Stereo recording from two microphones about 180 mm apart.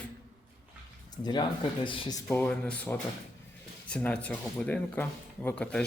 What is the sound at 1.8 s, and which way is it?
Speech, 30° left (ahead or behind).